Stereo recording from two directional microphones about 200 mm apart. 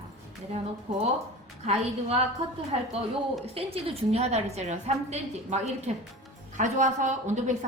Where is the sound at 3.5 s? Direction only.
30° right (ahead or behind).